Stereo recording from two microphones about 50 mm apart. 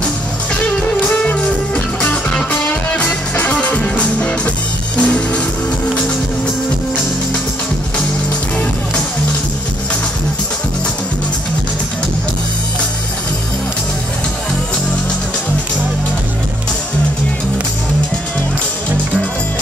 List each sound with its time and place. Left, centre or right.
0.6 s music: left